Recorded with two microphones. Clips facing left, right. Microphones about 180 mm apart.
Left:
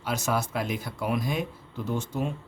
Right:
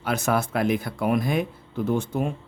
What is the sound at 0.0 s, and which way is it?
Speech, 55° right (ahead or behind).